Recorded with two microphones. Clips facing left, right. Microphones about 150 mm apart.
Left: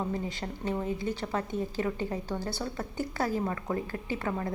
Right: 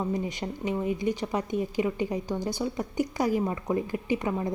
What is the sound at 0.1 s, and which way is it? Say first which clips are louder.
Speech: right 4 dB; 15° right (ahead or behind).